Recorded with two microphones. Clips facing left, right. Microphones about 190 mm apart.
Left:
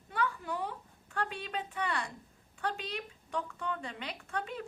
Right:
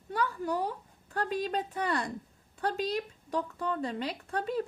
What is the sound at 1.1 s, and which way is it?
A woman's voice, 40° right (ahead or behind).